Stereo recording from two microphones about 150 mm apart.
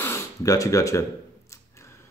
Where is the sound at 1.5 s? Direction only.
20° left (ahead or behind).